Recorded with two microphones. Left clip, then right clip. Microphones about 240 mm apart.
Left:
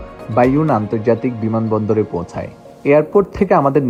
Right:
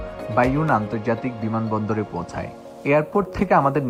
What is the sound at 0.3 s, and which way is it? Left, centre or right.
Speech, left.